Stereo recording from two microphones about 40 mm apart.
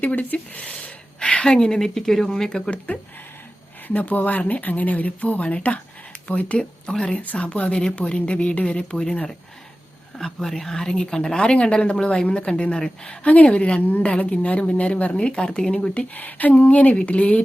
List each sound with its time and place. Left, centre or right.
0.0 s speech: left
0.6 s gasp: left
1.5 s a woman's voice: centre
2.6 s speech: left
5.4 s speech: left
6.6 s speech: left
7.1 s a woman's voice: left
10.2 s a woman's voice: centre; by 15.4 s left
15.4 s a woman's voice: centre
15.7 s speech: left
16.1 s speech: left
16.6 s speech: left